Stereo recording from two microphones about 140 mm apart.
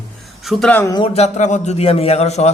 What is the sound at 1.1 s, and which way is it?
Speech, 55° left (ahead or behind).